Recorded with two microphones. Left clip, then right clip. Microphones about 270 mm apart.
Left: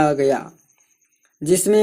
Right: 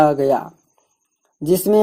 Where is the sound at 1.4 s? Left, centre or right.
Right.